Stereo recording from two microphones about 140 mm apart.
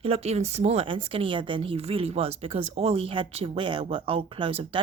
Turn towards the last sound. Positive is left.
turn(degrees=-40)  # may be behind; listen again after turning